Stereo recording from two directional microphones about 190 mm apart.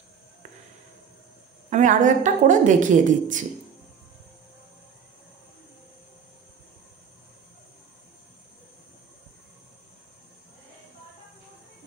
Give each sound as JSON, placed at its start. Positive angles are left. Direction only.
{"t": 1.7, "sound": "a woman's voice", "side_deg": -40}